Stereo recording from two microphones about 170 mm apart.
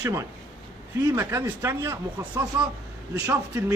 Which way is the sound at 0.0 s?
20° right (ahead or behind).